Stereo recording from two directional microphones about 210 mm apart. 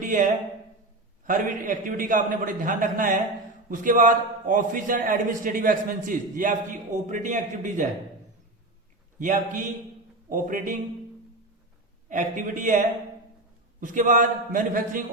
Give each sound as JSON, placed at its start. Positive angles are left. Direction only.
{"t": 0.0, "sound": "a man's voice", "side_deg": -40}
{"t": 9.1, "sound": "a man's voice", "side_deg": -40}
{"t": 12.0, "sound": "a man's voice", "side_deg": -35}